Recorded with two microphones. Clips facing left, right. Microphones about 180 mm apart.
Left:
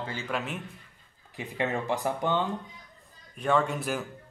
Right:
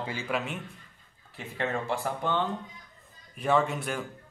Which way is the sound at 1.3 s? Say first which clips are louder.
Left 2 dB; 15° left (ahead or behind).